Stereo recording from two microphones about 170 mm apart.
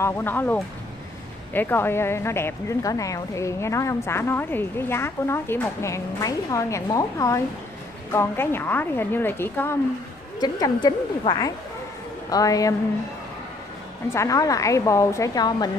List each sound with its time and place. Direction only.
0.0 s a woman's voice: 15° left (ahead or behind)
10.4 s a woman's voice: 25° left (ahead or behind)
14.1 s a woman's voice: 20° left (ahead or behind)